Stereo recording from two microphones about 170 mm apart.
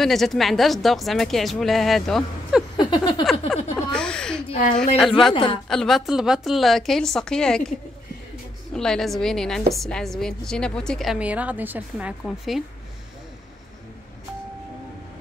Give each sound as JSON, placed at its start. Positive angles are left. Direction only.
{"t": 0.0, "sound": "a woman's voice", "side_deg": 0}
{"t": 2.8, "sound": "a sound", "side_deg": 25}
{"t": 3.5, "sound": "a woman's voice", "side_deg": 5}
{"t": 5.3, "sound": "a woman's voice", "side_deg": 30}
{"t": 5.7, "sound": "a woman's voice", "side_deg": 0}
{"t": 8.7, "sound": "a woman's voice", "side_deg": 5}